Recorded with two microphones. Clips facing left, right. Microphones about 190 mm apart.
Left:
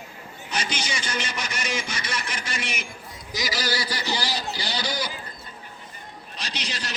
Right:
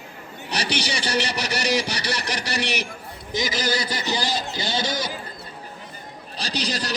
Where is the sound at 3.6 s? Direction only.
20° right (ahead or behind).